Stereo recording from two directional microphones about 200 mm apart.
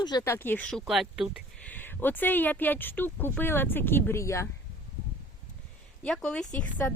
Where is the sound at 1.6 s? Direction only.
10° left (ahead or behind).